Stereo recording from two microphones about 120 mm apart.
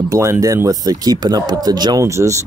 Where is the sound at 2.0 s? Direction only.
25° right (ahead or behind).